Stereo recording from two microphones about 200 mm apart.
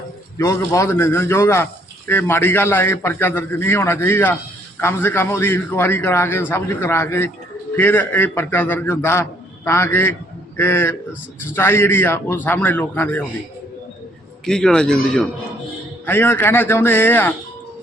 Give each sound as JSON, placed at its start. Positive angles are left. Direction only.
{"t": 0.3, "sound": "a man's voice", "side_deg": 15}
{"t": 14.4, "sound": "a man's voice", "side_deg": 5}